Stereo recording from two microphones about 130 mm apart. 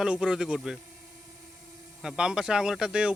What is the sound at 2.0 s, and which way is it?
Speech, 5° right (ahead or behind).